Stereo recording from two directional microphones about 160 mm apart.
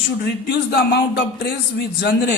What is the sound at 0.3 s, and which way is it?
Speech, 85° left.